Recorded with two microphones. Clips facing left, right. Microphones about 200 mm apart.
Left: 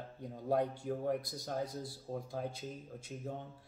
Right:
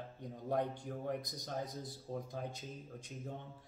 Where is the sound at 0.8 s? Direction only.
5° left (ahead or behind).